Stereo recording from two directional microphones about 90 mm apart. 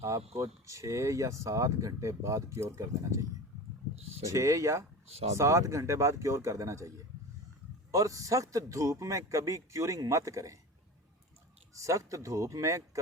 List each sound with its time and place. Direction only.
0.3 s speech: 35° right (ahead or behind)
4.3 s speech: 35° right (ahead or behind)
11.8 s speech: 35° right (ahead or behind)